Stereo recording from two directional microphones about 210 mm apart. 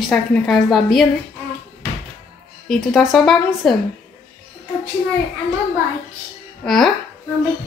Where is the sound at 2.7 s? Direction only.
Centre (ahead or behind).